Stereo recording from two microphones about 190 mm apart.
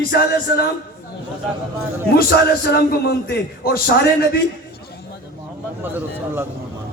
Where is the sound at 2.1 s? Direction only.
55° left (ahead or behind).